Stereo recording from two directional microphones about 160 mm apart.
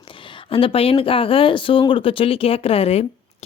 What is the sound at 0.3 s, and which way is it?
Speech, 35° left (ahead or behind).